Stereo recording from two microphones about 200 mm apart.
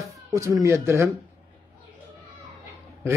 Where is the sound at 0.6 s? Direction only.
15° right (ahead or behind).